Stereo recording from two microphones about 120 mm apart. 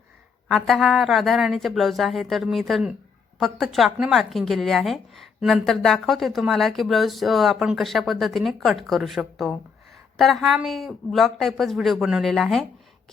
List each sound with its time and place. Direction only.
0.4 s a woman's voice: centre (ahead or behind)